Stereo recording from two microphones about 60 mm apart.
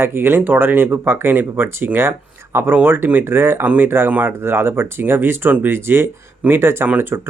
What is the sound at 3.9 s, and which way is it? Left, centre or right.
Speech, right.